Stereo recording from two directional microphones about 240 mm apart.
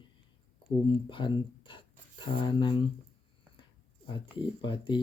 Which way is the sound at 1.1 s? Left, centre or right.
Centre.